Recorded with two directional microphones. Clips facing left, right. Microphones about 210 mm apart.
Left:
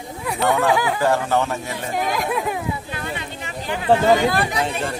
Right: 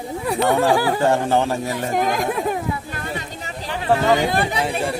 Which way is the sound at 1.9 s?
45° right (ahead or behind).